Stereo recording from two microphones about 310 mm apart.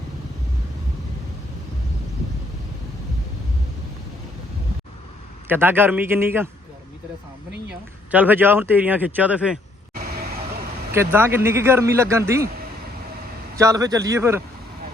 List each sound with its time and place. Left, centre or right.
5.5 s speech: centre
8.1 s a man's voice: centre
9.9 s vehicle: right
10.9 s speech: centre
13.6 s speech: centre